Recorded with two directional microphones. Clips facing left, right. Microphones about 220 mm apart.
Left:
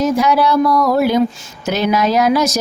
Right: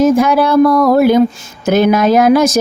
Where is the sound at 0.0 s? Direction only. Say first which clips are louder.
Right 4 dB; 50° right (ahead or behind).